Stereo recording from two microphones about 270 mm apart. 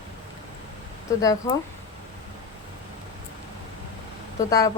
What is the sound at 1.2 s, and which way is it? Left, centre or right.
Speech, centre.